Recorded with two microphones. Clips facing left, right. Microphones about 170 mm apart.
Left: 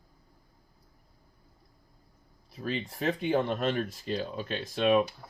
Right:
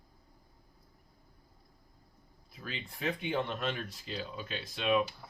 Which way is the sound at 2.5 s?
40° left (ahead or behind).